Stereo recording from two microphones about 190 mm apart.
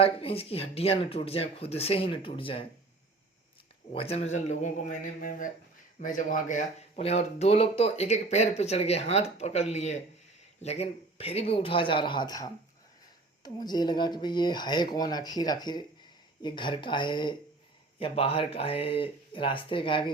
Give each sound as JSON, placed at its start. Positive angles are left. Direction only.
{"t": 0.0, "sound": "speech", "side_deg": 30}
{"t": 3.9, "sound": "speech", "side_deg": 30}